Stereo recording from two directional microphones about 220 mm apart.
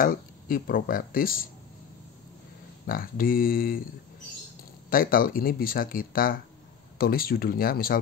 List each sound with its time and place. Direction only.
0.0 s speech: 40° left (ahead or behind)
2.9 s speech: 40° left (ahead or behind)
4.8 s speech: 40° left (ahead or behind)